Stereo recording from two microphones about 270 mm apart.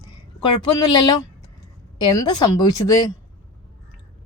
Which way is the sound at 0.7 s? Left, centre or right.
Left.